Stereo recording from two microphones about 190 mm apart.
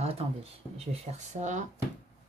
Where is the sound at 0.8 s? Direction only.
35° right (ahead or behind).